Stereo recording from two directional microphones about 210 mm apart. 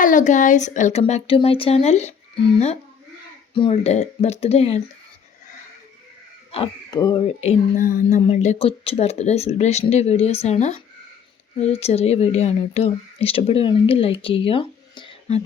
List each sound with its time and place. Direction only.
0.0 s speech: 40° left (ahead or behind)
6.5 s speech: 25° left (ahead or behind)
7.8 s speech: 40° left (ahead or behind); by 15.4 s 25° left (ahead or behind)